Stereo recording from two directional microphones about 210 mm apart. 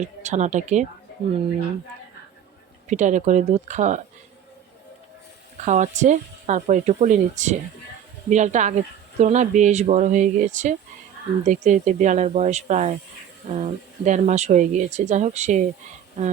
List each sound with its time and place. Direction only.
0.2 s speech: 35° right (ahead or behind)
2.8 s speech: 35° right (ahead or behind)
5.6 s speech: 35° right (ahead or behind)